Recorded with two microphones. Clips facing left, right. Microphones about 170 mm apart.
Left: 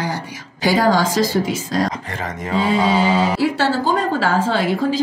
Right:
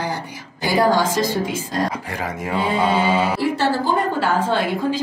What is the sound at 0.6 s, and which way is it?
Speech, 90° left.